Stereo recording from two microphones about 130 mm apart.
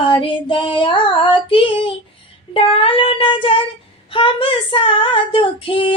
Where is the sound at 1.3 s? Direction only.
40° left (ahead or behind).